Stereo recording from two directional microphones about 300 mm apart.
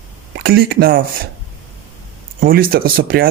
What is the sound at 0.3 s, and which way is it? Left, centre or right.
Speech, right.